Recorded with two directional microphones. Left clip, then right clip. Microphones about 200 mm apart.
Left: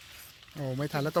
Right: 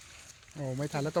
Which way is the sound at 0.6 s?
15° left (ahead or behind).